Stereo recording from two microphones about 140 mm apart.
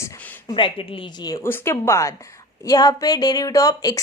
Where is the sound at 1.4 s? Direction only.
15° left (ahead or behind).